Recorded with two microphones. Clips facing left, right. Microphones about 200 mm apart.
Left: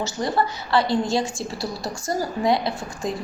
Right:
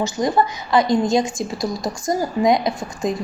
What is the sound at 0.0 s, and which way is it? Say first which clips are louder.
A woman's voice: right 4 dB; 15° right (ahead or behind).